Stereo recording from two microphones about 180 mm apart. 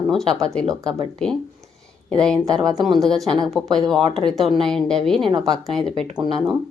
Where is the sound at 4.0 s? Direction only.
30° right (ahead or behind).